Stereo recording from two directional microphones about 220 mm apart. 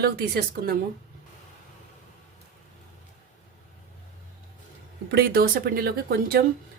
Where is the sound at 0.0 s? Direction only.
45° right (ahead or behind).